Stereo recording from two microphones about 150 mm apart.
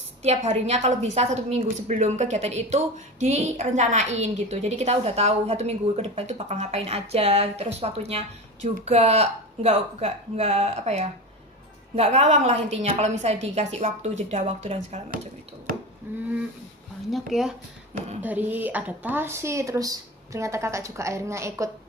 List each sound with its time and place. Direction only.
0.2 s a woman's voice: 45° right (ahead or behind)
16.1 s a sound: 15° right (ahead or behind)
17.1 s speech: centre (ahead or behind)
18.2 s speech: 10° right (ahead or behind)